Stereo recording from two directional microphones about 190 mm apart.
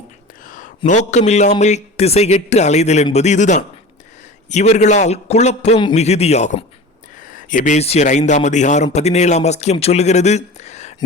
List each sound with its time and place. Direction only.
0.9 s a man's voice: 35° left (ahead or behind)